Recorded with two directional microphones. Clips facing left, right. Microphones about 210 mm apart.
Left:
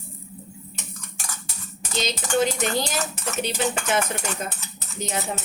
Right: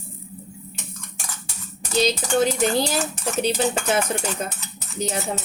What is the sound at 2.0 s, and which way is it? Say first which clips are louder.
Speech: right 3 dB; 35° right (ahead or behind).